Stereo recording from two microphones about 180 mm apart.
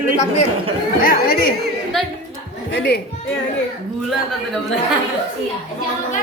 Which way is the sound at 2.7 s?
65° left (ahead or behind).